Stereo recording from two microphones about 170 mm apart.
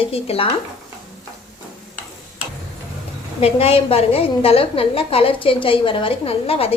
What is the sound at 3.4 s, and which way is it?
A woman's voice, 35° left (ahead or behind).